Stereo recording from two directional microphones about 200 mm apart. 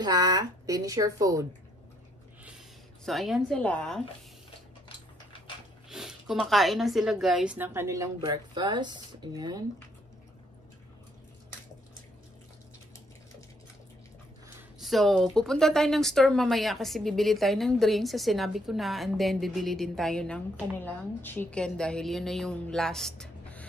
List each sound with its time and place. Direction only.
0.0 s speech: 20° right (ahead or behind)
3.1 s speech: centre (ahead or behind)
5.9 s speech: centre (ahead or behind); by 9.6 s 20° right (ahead or behind)
14.8 s speech: centre (ahead or behind)